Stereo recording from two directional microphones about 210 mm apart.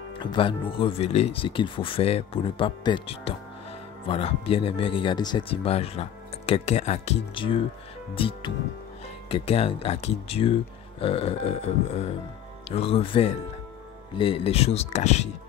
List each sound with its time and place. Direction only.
0.2 s speech: 20° left (ahead or behind)